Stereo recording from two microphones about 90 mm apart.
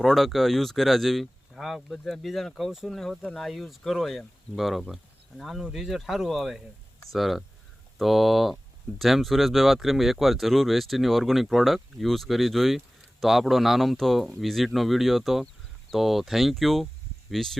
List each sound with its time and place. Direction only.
0.0 s speech: centre (ahead or behind)